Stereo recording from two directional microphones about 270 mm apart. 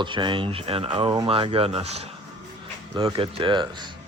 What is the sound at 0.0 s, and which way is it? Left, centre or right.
Speech, centre.